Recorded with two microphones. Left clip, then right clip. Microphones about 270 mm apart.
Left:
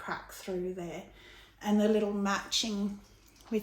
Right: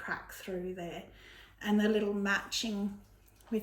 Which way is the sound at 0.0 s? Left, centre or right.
Centre.